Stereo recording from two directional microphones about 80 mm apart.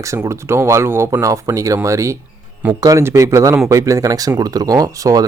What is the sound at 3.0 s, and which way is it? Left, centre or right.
A man's voice, right.